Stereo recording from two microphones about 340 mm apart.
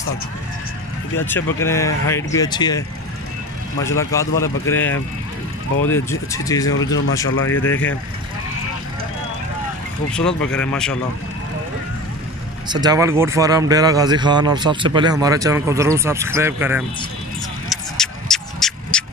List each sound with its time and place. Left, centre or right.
1.1 s speech: centre
3.8 s speech: centre
6.7 s speech: left
7.6 s speech: centre
10.1 s speech: centre
12.6 s speech: centre
17.6 s a sound: centre